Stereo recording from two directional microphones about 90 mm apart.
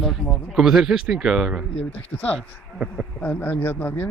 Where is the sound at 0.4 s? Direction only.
5° right (ahead or behind).